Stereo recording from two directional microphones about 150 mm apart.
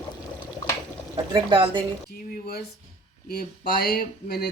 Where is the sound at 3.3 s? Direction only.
90° left.